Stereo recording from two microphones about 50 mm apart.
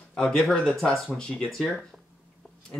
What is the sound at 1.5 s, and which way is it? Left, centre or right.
Speech, centre.